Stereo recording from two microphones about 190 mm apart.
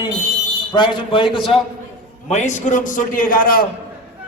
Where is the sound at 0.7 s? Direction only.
25° left (ahead or behind).